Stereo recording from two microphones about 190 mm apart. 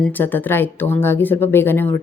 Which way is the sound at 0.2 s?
10° left (ahead or behind).